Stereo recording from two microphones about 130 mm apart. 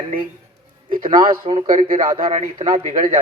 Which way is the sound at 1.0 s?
40° right (ahead or behind).